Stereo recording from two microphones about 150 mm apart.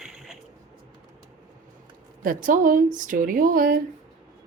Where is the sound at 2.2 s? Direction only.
65° right (ahead or behind).